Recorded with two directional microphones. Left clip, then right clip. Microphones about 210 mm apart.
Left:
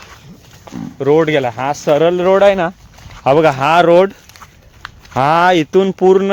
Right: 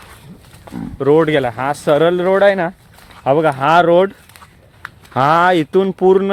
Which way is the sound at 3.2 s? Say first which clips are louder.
Left 2 dB; 45° left (ahead or behind).